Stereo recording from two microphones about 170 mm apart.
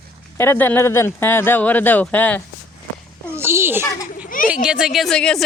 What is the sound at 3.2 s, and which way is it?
A child's voice, 15° right (ahead or behind).